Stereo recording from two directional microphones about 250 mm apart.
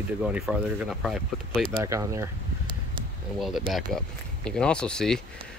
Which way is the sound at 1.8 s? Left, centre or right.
Centre.